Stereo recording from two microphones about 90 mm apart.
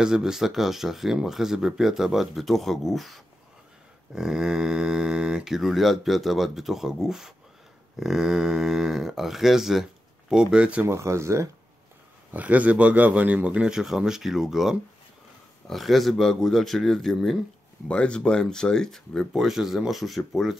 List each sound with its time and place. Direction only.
0.0 s speech: 5° right (ahead or behind)
10.9 s speech: 30° right (ahead or behind)
12.3 s speech: 15° right (ahead or behind); by 20.5 s centre (ahead or behind)